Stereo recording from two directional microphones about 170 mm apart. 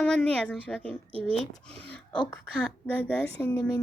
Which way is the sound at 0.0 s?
5° left (ahead or behind).